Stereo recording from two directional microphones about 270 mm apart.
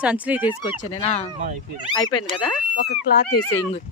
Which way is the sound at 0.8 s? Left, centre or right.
Left.